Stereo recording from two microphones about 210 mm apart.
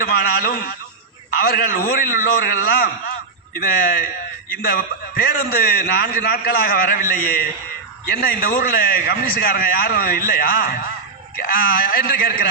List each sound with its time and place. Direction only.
0.0 s a man's voice: 45° left (ahead or behind)